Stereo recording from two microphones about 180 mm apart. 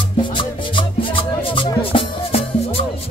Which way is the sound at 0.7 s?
30° left (ahead or behind).